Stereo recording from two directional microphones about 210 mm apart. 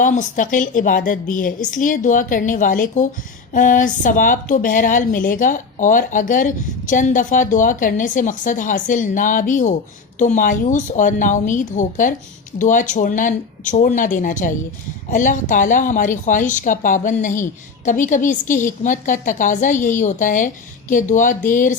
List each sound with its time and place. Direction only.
0.0 s a woman's voice: 40° left (ahead or behind)